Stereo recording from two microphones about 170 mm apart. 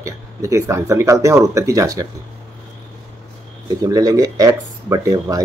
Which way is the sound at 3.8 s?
20° right (ahead or behind).